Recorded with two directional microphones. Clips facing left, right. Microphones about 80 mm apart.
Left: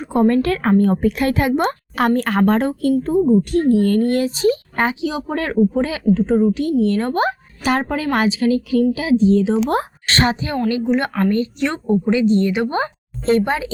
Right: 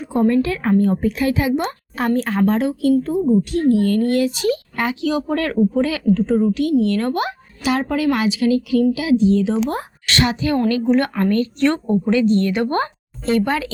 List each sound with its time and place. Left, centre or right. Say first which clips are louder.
0.0 s a woman's voice: left 1 dB; left
2.0 s a woman's voice: left 2 dB; left
2.5 s a woman's voice: even; left
4.9 s a woman's voice: right 2 dB; centre
13.2 s a woman's voice: left 2 dB; left